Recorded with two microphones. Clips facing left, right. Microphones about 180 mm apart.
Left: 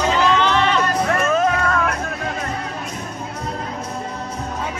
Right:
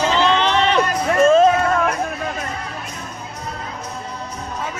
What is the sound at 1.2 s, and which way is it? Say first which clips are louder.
Music: right 6 dB; 25° right (ahead or behind).